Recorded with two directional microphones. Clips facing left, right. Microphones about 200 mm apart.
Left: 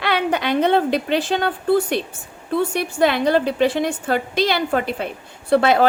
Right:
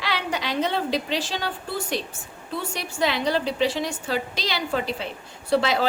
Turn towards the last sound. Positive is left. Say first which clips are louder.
# left 6 dB
turn(degrees=55)  # may be behind; listen again after turning